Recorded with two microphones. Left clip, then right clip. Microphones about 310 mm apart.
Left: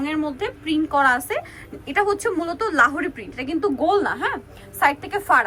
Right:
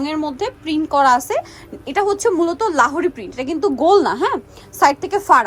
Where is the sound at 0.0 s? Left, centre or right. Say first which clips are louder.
Right 3 dB; centre.